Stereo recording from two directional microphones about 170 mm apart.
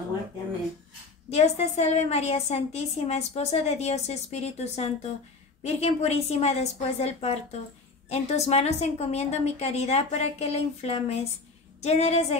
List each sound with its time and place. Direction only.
1.3 s a woman's voice: 40° left (ahead or behind)